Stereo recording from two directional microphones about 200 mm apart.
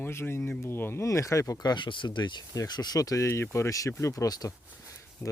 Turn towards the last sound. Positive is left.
turn(degrees=15)  # may be behind; listen again after turning